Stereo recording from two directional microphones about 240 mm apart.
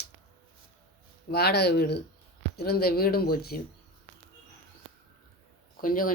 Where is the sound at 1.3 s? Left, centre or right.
Left.